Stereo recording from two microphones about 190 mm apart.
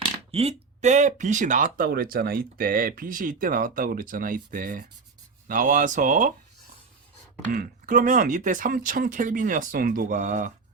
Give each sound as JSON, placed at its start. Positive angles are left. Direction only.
{"t": 0.0, "sound": "speech", "side_deg": -30}
{"t": 7.5, "sound": "speech", "side_deg": -45}